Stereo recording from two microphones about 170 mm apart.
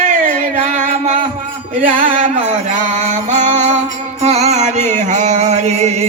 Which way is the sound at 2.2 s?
45° right (ahead or behind).